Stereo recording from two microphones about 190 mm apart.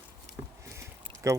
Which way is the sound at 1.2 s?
15° right (ahead or behind).